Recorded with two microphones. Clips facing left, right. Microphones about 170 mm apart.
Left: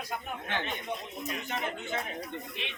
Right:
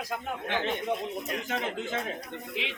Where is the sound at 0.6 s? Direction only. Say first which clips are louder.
Right 7 dB; 65° right (ahead or behind).